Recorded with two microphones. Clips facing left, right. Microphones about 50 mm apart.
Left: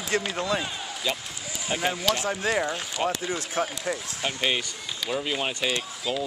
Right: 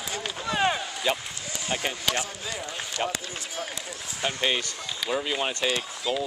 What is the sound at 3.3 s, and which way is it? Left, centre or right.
Speech, left.